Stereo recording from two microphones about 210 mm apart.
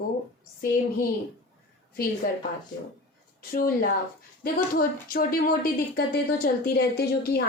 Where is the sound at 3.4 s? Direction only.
45° left (ahead or behind).